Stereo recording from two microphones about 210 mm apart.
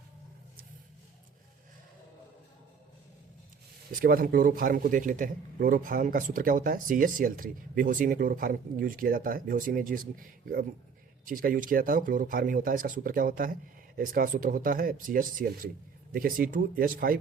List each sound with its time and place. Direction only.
4.0 s speech: 45° right (ahead or behind)